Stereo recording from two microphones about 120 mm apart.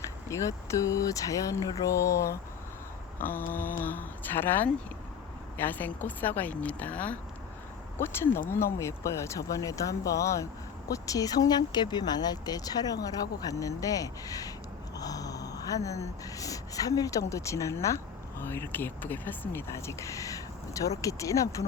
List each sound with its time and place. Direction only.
0.3 s a woman's voice: 25° left (ahead or behind)